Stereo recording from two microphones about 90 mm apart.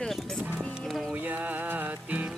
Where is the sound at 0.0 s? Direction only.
5° left (ahead or behind).